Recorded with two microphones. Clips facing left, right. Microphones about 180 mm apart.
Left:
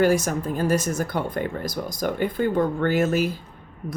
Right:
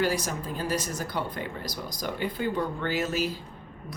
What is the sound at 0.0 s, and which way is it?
Speech, 50° left (ahead or behind).